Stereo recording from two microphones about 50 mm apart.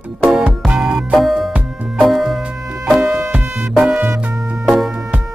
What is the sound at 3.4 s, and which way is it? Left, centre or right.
Music, right.